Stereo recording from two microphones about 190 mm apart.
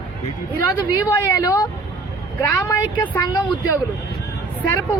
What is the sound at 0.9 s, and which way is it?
Speech, 20° left (ahead or behind).